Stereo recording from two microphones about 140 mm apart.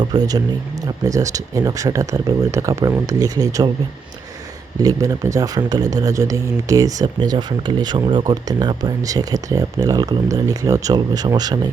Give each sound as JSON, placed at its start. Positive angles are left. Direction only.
{"t": 0.0, "sound": "speech", "side_deg": -30}
{"t": 4.8, "sound": "speech", "side_deg": -25}